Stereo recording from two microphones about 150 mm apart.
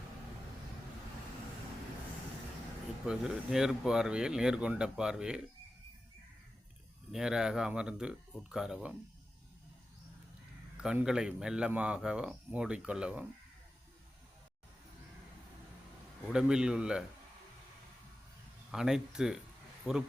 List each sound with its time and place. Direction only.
3.1 s speech: 5° right (ahead or behind)
7.1 s speech: 5° right (ahead or behind)
10.8 s speech: 5° right (ahead or behind)
16.3 s speech: 5° right (ahead or behind)
18.7 s speech: 5° right (ahead or behind)